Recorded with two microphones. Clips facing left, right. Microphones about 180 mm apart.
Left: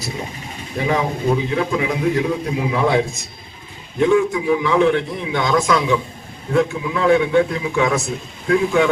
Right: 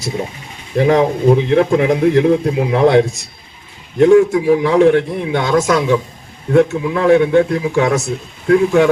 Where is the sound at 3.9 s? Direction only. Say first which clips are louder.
Right 7 dB; 45° right (ahead or behind).